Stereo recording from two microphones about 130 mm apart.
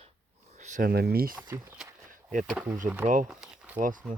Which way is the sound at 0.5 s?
70° right (ahead or behind).